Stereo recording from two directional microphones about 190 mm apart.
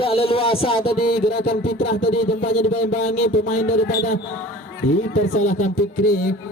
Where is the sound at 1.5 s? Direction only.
55° left (ahead or behind).